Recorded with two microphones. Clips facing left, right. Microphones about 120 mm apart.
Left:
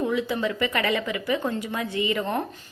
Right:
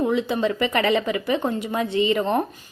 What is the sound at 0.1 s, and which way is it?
A woman's voice, 25° right (ahead or behind).